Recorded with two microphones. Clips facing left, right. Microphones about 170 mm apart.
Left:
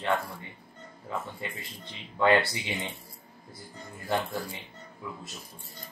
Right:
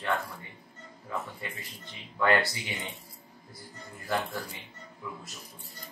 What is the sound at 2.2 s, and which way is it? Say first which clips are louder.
Speech: left 3 dB; 20° left (ahead or behind).